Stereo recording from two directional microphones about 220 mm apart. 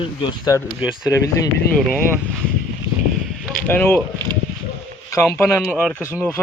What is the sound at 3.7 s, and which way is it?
Speech, 10° left (ahead or behind).